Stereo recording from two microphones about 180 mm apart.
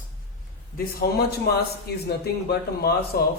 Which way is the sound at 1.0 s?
60° left (ahead or behind).